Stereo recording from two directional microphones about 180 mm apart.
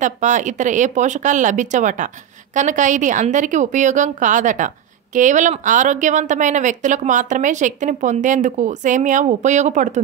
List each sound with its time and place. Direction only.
0.0 s a woman's voice: 45° right (ahead or behind)